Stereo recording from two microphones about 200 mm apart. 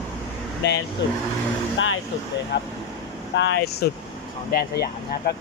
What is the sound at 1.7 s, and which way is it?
Speech, 75° left (ahead or behind).